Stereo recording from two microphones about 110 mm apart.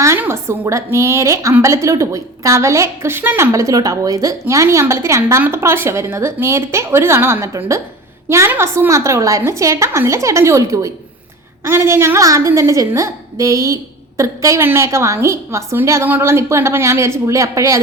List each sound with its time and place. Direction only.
0.0 s a woman's voice: 25° right (ahead or behind)